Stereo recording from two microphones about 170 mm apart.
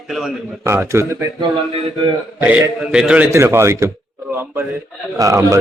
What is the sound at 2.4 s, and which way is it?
A man's voice, 10° right (ahead or behind).